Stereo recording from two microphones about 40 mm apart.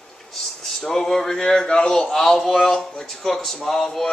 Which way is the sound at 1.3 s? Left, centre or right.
Centre.